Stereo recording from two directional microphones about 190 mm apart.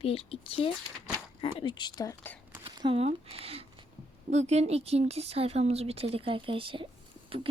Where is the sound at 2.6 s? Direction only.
25° right (ahead or behind).